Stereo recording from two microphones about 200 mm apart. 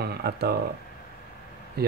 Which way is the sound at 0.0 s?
55° right (ahead or behind).